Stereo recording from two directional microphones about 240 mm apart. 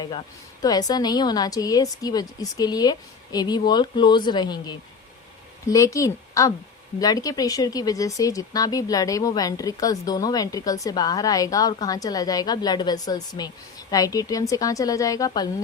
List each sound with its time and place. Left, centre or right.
0.6 s speech: centre